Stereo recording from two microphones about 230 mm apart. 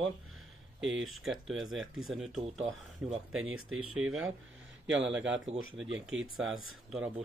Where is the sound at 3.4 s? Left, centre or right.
Right.